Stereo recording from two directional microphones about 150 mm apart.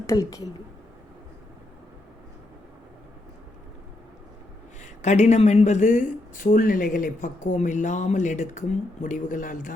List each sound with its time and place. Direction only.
0.0 s a woman's voice: 25° left (ahead or behind)
4.8 s speech: 50° left (ahead or behind)